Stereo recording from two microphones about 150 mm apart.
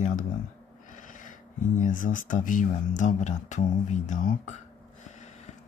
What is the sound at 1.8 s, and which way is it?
Speech, 60° left (ahead or behind).